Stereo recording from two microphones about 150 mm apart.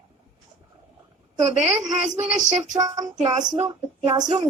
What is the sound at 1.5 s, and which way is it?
Speech, 55° right (ahead or behind).